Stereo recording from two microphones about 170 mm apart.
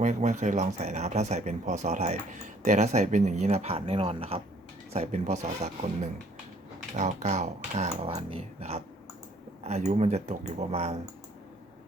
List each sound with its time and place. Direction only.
0.0 s speech: 45° right (ahead or behind)